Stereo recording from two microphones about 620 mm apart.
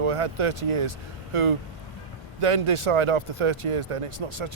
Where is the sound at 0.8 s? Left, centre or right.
Right.